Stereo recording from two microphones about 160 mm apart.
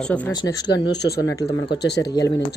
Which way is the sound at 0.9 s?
90° left.